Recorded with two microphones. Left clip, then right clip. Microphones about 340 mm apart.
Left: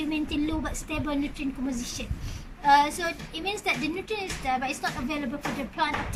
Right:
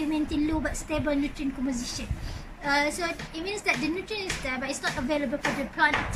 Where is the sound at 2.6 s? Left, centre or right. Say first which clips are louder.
Left 5 dB; centre.